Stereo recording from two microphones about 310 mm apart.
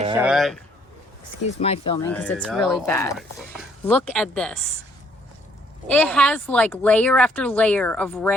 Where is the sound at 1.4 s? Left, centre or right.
Centre.